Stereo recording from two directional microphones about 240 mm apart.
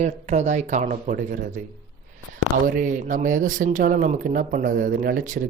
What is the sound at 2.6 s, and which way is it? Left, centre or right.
A man's voice, right.